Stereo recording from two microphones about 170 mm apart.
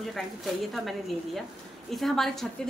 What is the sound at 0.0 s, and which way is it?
A woman's voice, centre (ahead or behind).